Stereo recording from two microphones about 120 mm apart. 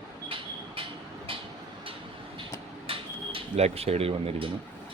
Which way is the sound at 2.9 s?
55° right (ahead or behind).